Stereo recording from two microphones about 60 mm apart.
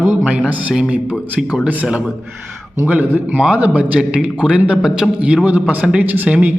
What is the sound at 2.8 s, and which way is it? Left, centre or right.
A man's voice, right.